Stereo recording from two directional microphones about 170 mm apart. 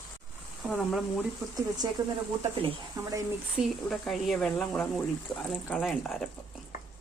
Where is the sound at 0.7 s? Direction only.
Centre (ahead or behind).